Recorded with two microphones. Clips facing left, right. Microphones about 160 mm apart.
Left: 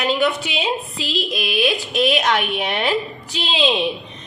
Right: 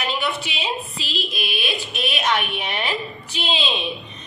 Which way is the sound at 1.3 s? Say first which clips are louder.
Left 8 dB; 90° left.